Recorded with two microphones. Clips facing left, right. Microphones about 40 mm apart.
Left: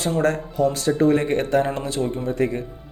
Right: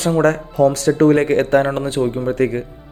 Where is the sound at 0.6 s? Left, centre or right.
Right.